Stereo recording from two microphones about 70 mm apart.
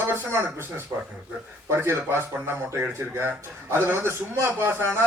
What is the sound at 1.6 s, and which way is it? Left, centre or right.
A man's voice, right.